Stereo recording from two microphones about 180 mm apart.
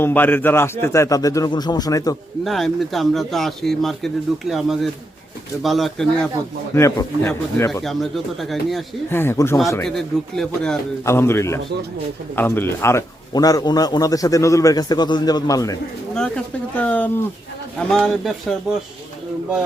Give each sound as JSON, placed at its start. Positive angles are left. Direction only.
{"t": 0.0, "sound": "speech", "side_deg": 10}
{"t": 2.4, "sound": "speech", "side_deg": 0}
{"t": 6.7, "sound": "speech", "side_deg": 15}
{"t": 9.0, "sound": "speech", "side_deg": 15}
{"t": 9.8, "sound": "speech", "side_deg": 5}
{"t": 11.0, "sound": "speech", "side_deg": 15}
{"t": 16.1, "sound": "speech", "side_deg": 5}